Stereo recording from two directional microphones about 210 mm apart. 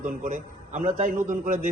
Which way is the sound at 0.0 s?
35° right (ahead or behind).